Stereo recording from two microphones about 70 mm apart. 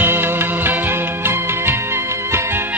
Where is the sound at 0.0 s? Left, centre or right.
Right.